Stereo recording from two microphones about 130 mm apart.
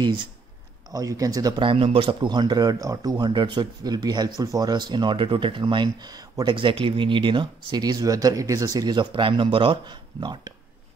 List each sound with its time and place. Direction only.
0.0 s speech: 35° right (ahead or behind)
0.9 s speech: 25° right (ahead or behind)